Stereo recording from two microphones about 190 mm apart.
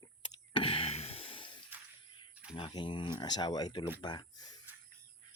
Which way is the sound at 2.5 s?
25° left (ahead or behind).